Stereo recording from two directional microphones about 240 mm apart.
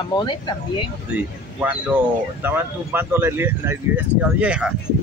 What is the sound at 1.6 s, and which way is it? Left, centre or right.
Speech, centre.